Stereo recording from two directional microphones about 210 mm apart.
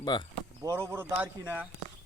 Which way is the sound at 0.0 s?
20° left (ahead or behind).